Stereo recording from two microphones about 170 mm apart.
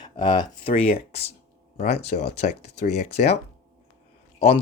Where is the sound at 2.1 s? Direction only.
50° left (ahead or behind).